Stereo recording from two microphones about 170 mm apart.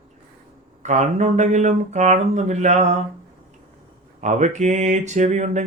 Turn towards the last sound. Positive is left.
turn(degrees=-45)  # may be behind; listen again after turning